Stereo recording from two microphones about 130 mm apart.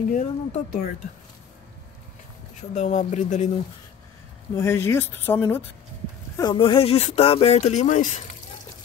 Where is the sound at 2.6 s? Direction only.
65° left (ahead or behind).